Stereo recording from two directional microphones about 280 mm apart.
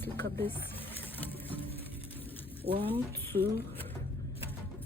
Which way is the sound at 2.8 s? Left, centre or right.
Centre.